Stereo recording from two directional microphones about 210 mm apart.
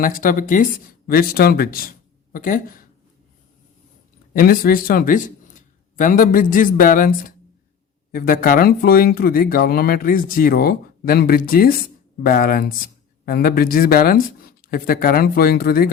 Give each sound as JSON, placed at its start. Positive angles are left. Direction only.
{"t": 0.0, "sound": "speech", "side_deg": 40}
{"t": 4.4, "sound": "speech", "side_deg": 40}